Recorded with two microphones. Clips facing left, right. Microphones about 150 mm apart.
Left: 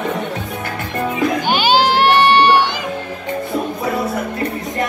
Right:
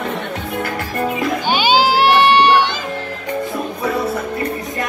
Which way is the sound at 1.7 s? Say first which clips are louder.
Even; 10° right (ahead or behind).